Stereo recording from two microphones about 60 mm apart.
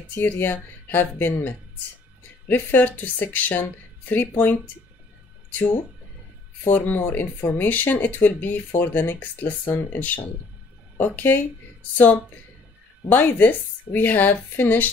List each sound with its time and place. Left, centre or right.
0.1 s speech: left
13.1 s speech: left